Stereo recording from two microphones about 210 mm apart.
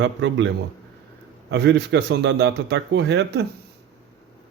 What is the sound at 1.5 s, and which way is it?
A man's voice, 55° right (ahead or behind).